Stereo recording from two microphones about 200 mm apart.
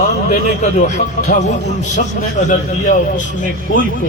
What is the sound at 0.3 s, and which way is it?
A man's voice, 40° left (ahead or behind).